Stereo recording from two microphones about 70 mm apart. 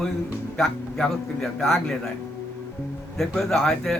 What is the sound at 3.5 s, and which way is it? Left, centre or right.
Speech, centre.